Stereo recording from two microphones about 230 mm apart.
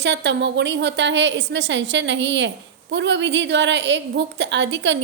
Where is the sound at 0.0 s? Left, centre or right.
Right.